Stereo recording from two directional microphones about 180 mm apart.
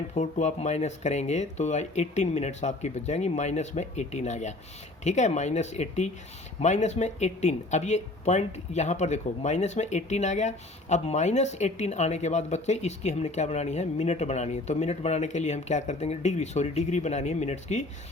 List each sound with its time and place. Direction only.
0.1 s speech: 40° left (ahead or behind)